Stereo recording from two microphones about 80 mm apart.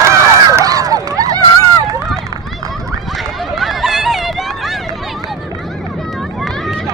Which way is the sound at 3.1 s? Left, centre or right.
Centre.